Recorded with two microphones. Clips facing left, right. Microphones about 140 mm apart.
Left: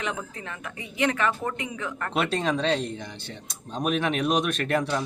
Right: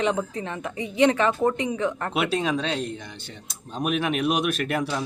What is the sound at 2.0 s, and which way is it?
A man's voice, 5° right (ahead or behind).